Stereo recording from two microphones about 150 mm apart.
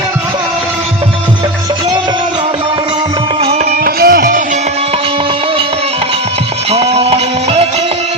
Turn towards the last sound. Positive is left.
turn(degrees=-45)  # may be behind; listen again after turning